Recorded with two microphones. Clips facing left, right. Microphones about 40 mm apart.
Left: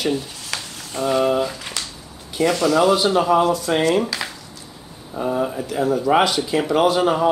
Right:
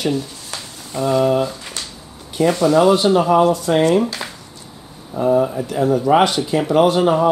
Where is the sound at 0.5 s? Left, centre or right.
Left.